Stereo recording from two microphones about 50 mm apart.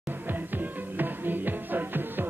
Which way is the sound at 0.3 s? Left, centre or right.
Right.